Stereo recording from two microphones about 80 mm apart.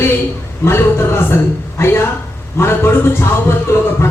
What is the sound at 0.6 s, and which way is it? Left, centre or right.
Speech, left.